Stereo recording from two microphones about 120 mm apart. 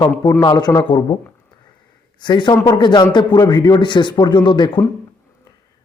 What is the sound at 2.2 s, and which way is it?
A man's voice, 40° left (ahead or behind).